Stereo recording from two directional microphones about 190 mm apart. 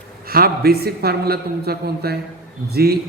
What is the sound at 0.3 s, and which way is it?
A man's voice, 50° right (ahead or behind).